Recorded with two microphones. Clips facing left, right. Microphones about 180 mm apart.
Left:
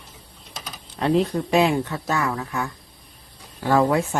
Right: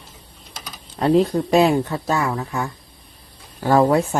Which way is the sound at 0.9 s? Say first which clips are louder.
Right 4 dB; 35° right (ahead or behind).